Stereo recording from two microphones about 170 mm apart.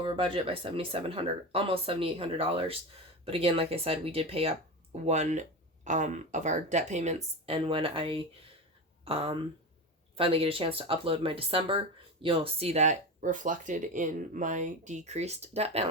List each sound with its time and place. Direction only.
0.0 s speech: 30° right (ahead or behind)